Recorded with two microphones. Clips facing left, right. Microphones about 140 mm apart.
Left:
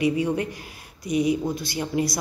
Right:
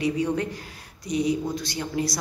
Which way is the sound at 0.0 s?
10° left (ahead or behind).